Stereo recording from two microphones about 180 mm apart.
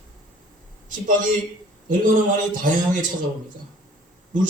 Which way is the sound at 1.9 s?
45° right (ahead or behind).